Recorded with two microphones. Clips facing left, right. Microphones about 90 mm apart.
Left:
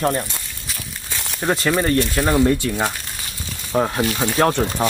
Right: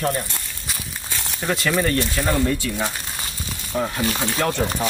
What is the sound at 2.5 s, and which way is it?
Speech, 55° left (ahead or behind).